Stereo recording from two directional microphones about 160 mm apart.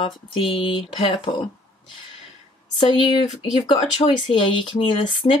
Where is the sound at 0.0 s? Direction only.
35° left (ahead or behind).